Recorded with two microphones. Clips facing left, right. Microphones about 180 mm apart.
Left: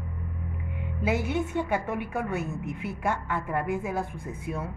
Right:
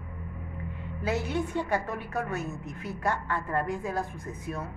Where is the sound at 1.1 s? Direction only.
15° left (ahead or behind).